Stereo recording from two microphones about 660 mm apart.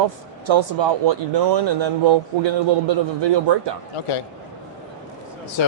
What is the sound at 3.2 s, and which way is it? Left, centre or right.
Speech, right.